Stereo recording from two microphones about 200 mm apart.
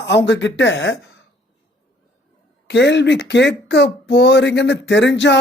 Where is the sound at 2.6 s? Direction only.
60° left (ahead or behind).